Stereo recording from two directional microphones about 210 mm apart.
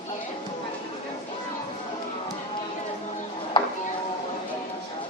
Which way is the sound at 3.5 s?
25° left (ahead or behind).